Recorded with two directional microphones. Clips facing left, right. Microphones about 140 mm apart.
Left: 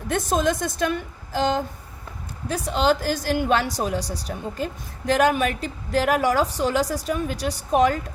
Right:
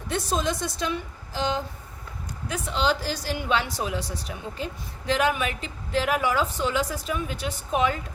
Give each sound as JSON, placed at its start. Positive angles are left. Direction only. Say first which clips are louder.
{"t": 0.1, "sound": "a woman's voice", "louder": "left 4 dB", "side_deg": 50}